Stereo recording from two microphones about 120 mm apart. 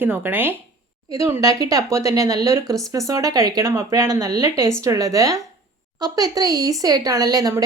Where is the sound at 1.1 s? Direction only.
30° right (ahead or behind).